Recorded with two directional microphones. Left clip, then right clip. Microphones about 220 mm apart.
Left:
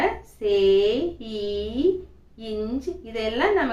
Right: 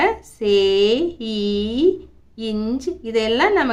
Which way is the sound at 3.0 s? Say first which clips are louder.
Right 7 dB; 55° right (ahead or behind).